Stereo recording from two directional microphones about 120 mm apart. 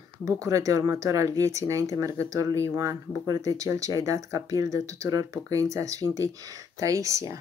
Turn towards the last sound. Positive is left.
turn(degrees=-25)  # may be behind; listen again after turning